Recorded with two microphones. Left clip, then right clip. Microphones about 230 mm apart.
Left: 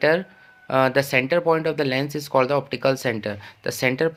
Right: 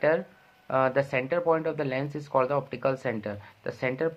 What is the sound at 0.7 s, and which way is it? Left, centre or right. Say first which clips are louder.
Speech: left 6 dB; left.